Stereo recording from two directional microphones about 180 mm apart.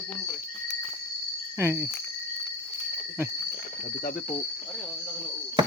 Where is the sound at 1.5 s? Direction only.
15° right (ahead or behind).